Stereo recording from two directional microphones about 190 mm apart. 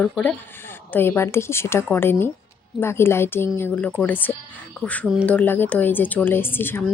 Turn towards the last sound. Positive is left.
turn(degrees=10)  # may be behind; listen again after turning